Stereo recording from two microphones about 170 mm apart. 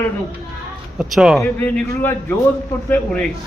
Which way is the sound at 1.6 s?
10° left (ahead or behind).